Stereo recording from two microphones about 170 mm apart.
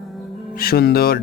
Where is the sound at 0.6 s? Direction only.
65° left (ahead or behind).